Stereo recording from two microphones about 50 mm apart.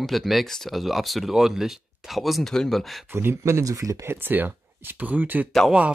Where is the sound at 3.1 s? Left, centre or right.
Right.